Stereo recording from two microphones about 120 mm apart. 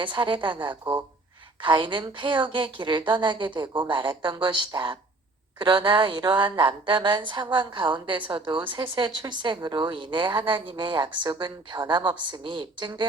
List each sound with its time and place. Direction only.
0.0 s a woman's voice: 40° right (ahead or behind)